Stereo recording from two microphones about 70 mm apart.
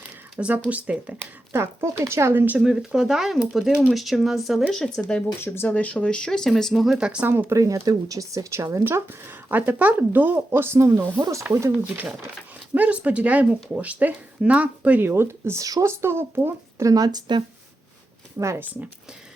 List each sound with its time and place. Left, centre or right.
0.3 s speech: centre
1.5 s speech: right
2.6 s speech: centre
5.4 s speech: left; by 6.8 s centre
6.8 s speech: centre
7.3 s speech: right
7.5 s speech: right
8.8 s speech: right
12.7 s speech: right
15.0 s speech: right
15.6 s speech: right
16.8 s speech: right
18.3 s speech: right